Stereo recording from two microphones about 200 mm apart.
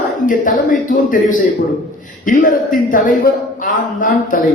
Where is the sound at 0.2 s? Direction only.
40° left (ahead or behind).